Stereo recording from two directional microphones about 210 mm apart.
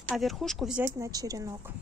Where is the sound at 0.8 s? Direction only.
15° right (ahead or behind).